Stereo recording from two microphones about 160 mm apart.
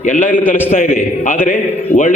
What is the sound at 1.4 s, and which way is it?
Speech, 55° left (ahead or behind).